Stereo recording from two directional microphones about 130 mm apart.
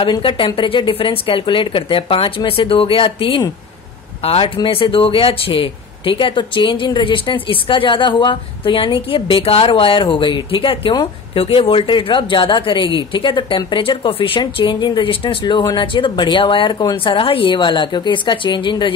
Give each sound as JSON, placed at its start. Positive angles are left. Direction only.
{"t": 0.0, "sound": "speech", "side_deg": 40}